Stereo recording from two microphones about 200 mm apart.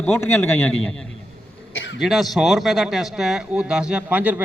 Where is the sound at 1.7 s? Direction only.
70° left (ahead or behind).